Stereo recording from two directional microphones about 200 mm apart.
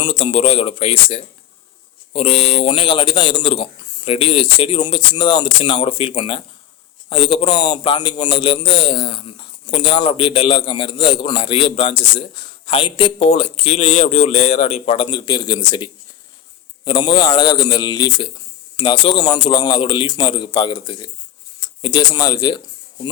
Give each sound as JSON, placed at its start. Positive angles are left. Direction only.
{"t": 0.0, "sound": "a man's voice", "side_deg": 25}